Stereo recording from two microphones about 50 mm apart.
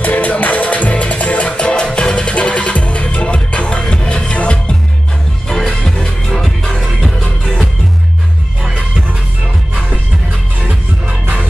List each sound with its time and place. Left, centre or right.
0.0 s music: left
1.6 s music: centre
5.5 s music: centre